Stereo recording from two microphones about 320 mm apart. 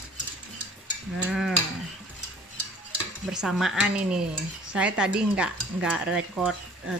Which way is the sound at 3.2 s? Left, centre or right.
Centre.